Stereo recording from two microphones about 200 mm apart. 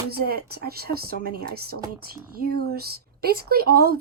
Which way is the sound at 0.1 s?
50° right (ahead or behind).